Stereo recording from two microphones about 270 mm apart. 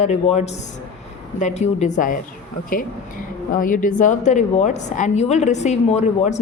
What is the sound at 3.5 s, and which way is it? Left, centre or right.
A woman's voice, left.